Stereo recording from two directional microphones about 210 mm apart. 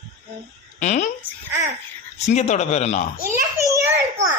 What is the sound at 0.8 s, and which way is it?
Speech, 35° left (ahead or behind).